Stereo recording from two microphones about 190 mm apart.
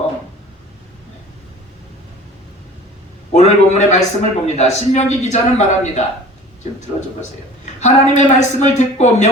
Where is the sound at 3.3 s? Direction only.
40° left (ahead or behind).